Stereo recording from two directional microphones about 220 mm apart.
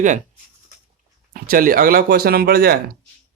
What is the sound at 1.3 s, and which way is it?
Speech, 40° right (ahead or behind).